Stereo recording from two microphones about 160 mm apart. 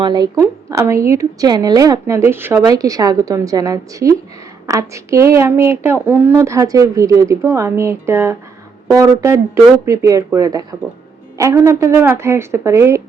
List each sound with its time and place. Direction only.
0.0 s a woman's voice: 25° right (ahead or behind)